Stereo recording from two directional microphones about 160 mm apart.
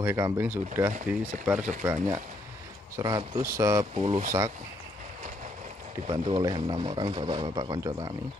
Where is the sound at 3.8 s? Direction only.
40° right (ahead or behind).